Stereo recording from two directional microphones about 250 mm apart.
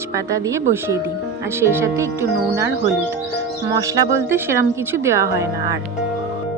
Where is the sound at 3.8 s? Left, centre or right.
Centre.